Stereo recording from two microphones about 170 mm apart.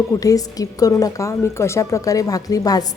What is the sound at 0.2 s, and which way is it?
A woman's voice, 20° left (ahead or behind).